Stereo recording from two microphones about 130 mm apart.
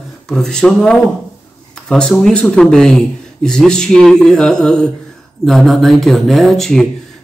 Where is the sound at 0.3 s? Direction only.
5° left (ahead or behind).